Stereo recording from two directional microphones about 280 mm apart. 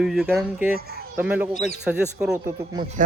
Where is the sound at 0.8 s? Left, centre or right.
Right.